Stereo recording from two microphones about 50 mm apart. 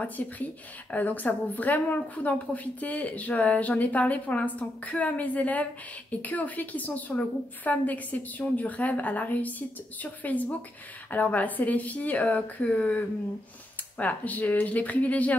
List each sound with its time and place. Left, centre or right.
0.0 s a woman's voice: left